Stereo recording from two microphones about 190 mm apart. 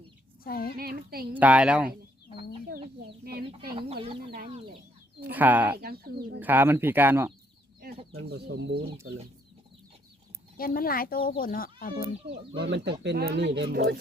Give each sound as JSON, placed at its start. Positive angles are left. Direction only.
{"t": 0.4, "sound": "speech", "side_deg": 50}
{"t": 0.8, "sound": "speech", "side_deg": -55}
{"t": 1.3, "sound": "speech", "side_deg": -10}
{"t": 3.2, "sound": "speech", "side_deg": -55}
{"t": 5.2, "sound": "speech", "side_deg": -10}
{"t": 5.7, "sound": "speech", "side_deg": -55}
{"t": 6.4, "sound": "speech", "side_deg": -10}
{"t": 8.2, "sound": "speech", "side_deg": -60}
{"t": 10.6, "sound": "speech", "side_deg": 50}
{"t": 12.5, "sound": "speech", "side_deg": -65}